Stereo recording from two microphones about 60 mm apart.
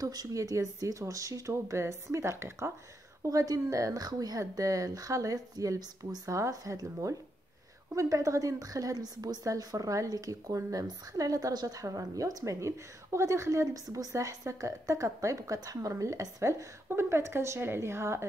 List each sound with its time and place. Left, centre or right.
0.0 s a woman's voice: right
1.5 s a woman's voice: right
3.2 s a woman's voice: right
12.5 s speech: right
16.9 s a woman's voice: right